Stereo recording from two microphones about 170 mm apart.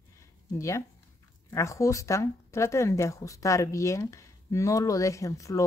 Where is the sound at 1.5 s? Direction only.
15° left (ahead or behind).